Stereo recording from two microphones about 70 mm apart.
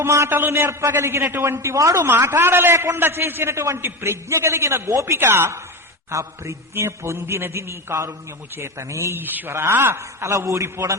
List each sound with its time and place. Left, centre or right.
0.0 s a man's voice: right
0.3 s a man's voice: right
2.0 s a man's voice: right
6.1 s a man's voice: right